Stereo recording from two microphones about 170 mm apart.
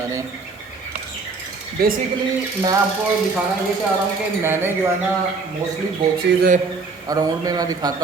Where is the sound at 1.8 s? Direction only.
65° right (ahead or behind).